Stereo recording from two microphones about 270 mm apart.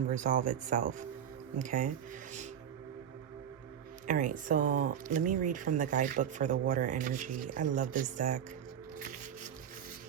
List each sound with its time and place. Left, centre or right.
0.1 s speech: right
4.0 s speech: right